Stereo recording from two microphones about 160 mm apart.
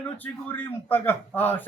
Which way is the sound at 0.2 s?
10° left (ahead or behind).